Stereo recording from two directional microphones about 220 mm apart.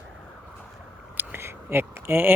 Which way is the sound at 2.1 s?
10° right (ahead or behind).